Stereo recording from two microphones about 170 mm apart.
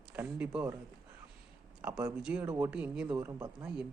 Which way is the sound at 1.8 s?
10° right (ahead or behind).